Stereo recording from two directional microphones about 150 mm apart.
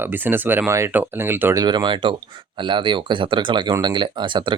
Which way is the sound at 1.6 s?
30° right (ahead or behind).